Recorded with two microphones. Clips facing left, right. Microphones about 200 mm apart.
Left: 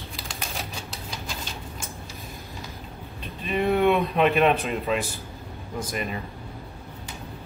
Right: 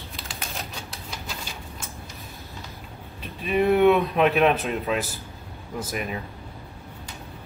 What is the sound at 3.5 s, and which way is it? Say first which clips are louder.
Speech: right 3 dB; centre (ahead or behind).